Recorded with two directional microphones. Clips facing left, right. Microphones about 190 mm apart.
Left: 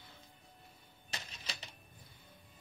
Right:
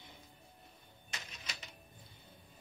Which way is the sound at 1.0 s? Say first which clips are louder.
Left 2 dB; 35° left (ahead or behind).